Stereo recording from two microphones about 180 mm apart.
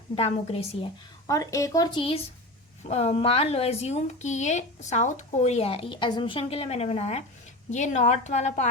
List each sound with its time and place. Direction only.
0.2 s a woman's voice: 30° left (ahead or behind)
1.3 s a woman's voice: 20° left (ahead or behind); by 8.7 s 40° left (ahead or behind)